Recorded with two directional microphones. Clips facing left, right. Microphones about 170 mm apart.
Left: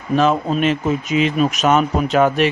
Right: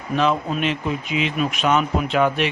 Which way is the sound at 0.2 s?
45° left (ahead or behind).